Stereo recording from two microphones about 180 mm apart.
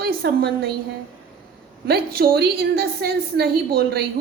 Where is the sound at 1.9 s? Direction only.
60° right (ahead or behind).